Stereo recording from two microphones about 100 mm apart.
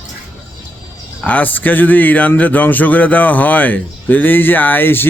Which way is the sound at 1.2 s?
15° left (ahead or behind).